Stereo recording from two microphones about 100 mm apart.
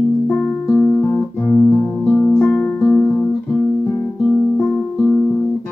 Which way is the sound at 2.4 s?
15° left (ahead or behind).